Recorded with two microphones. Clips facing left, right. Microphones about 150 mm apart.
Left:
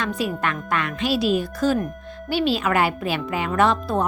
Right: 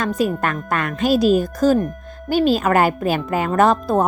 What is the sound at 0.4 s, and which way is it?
A woman's voice, 45° right (ahead or behind).